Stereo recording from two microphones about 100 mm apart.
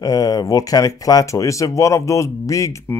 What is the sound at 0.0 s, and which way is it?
Speech, 40° left (ahead or behind).